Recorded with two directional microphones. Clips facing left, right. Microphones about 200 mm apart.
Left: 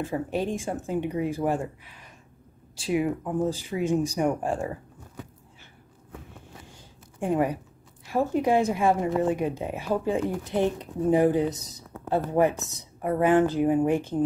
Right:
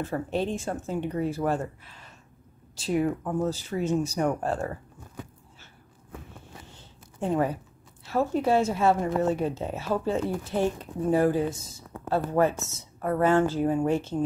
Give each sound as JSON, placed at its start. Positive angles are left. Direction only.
{"t": 0.0, "sound": "a woman's voice", "side_deg": 10}
{"t": 6.7, "sound": "a sound", "side_deg": 15}
{"t": 8.1, "sound": "a woman's voice", "side_deg": 15}